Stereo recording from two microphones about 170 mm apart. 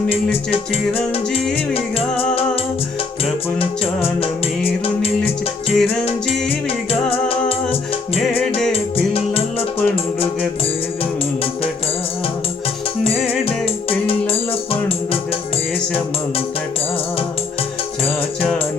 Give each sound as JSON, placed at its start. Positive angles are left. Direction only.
{"t": 5.7, "sound": "music", "side_deg": 5}
{"t": 8.7, "sound": "music", "side_deg": 35}
{"t": 13.1, "sound": "music", "side_deg": 35}